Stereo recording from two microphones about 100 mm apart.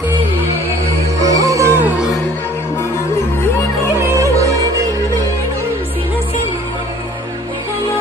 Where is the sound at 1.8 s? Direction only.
15° right (ahead or behind).